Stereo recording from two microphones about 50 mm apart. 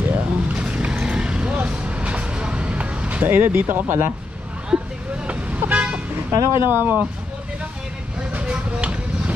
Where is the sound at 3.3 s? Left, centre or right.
Right.